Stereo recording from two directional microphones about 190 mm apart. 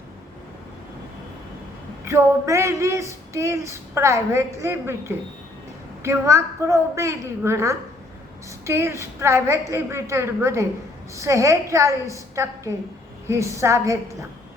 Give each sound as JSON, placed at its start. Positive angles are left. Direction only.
{"t": 2.0, "sound": "speech", "side_deg": -15}